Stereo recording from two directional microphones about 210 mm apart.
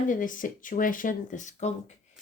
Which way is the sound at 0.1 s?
40° left (ahead or behind).